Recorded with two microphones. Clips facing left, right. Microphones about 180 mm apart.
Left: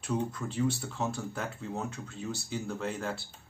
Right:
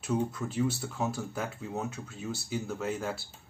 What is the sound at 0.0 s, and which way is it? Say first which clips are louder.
Speech: right 2 dB; 5° right (ahead or behind).